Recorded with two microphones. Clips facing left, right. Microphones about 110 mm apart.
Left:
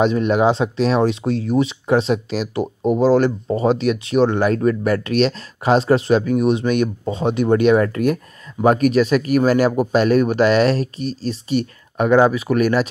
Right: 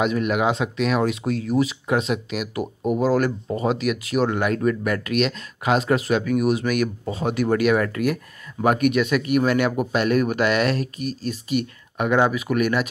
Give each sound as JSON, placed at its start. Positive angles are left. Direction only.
{"t": 0.0, "sound": "speech", "side_deg": 30}